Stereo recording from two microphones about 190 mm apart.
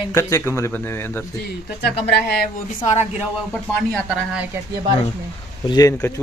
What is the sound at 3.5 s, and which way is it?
Speech, centre (ahead or behind).